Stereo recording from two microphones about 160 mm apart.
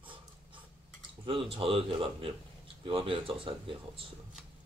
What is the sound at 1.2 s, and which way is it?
Speech, 35° right (ahead or behind).